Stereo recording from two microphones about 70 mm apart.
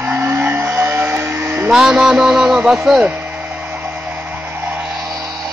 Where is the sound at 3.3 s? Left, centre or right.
Right.